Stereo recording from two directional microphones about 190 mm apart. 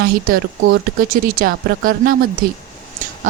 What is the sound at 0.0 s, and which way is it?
Speech, 55° right (ahead or behind).